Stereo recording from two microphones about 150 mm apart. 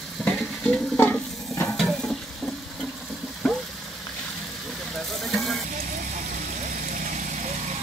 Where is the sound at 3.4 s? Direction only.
Centre (ahead or behind).